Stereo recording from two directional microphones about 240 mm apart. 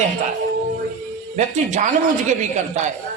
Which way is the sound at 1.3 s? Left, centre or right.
Right.